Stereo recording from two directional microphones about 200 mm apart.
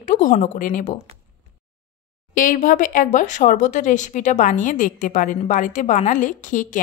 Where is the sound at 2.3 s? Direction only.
40° left (ahead or behind).